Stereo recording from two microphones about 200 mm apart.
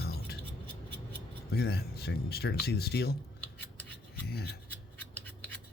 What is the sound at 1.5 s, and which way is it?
Speech, 50° left (ahead or behind).